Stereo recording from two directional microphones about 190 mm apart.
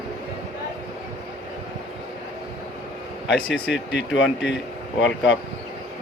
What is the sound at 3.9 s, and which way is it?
Speech, 75° left (ahead or behind).